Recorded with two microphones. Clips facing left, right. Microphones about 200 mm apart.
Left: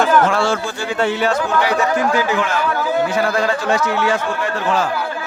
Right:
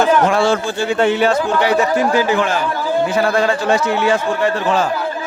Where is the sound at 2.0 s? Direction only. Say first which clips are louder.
Right 2 dB; 30° right (ahead or behind).